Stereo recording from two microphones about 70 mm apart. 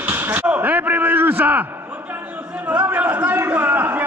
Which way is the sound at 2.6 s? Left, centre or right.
Right.